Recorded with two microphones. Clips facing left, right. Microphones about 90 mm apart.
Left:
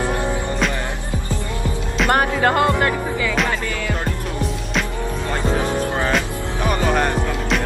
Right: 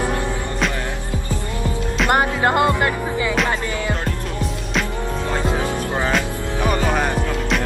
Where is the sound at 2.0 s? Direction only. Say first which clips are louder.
Left 1 dB; 20° right (ahead or behind).